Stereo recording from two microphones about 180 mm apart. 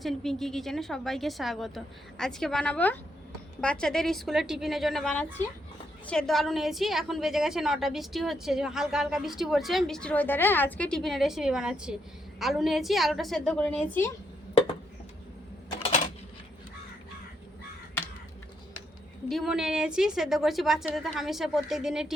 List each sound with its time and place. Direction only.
0.0 s a woman's voice: centre (ahead or behind)
19.3 s a woman's voice: centre (ahead or behind)